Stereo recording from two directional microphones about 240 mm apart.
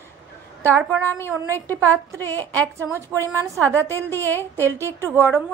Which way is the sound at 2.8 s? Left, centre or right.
Centre.